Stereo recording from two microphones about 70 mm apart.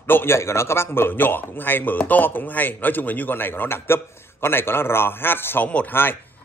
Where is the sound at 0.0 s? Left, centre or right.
Left.